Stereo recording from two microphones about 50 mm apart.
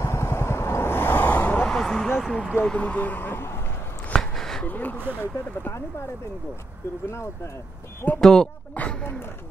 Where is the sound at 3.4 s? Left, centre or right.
Left.